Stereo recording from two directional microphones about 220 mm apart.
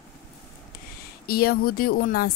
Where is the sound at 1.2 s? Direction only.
45° left (ahead or behind).